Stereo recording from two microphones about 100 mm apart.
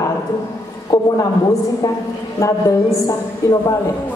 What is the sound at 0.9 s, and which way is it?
Speech, 30° left (ahead or behind).